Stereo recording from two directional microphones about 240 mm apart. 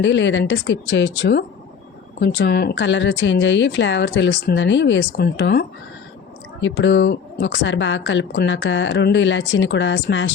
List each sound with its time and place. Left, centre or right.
0.0 s speech: left